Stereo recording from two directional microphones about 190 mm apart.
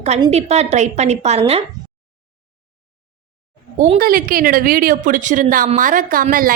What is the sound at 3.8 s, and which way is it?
A woman's voice, 45° right (ahead or behind).